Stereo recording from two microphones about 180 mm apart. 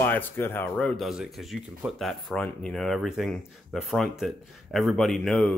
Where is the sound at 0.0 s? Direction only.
10° left (ahead or behind).